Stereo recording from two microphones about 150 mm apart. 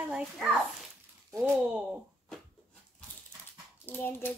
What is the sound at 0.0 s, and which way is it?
Speech, 10° right (ahead or behind).